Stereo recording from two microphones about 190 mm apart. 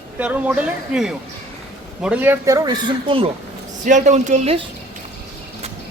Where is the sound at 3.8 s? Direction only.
40° right (ahead or behind).